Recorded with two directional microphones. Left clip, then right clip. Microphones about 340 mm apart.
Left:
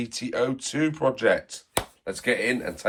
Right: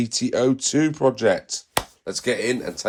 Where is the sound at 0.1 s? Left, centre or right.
Right.